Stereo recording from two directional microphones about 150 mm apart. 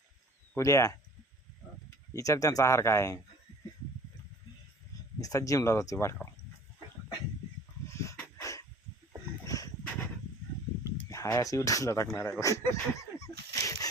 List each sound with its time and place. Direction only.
0.5 s speech: 20° left (ahead or behind)
2.1 s speech: 20° left (ahead or behind)
5.2 s speech: 20° left (ahead or behind)
7.9 s dog: 20° left (ahead or behind)
9.4 s a sound: 20° left (ahead or behind)
10.8 s speech: 20° left (ahead or behind)
13.5 s dog: 20° left (ahead or behind)